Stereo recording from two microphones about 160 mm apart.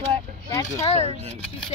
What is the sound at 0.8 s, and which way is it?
Child singing, 40° left (ahead or behind).